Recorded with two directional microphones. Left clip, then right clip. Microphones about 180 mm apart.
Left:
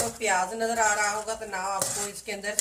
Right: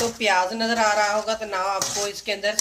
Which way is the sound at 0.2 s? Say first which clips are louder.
Right 4 dB; 45° right (ahead or behind).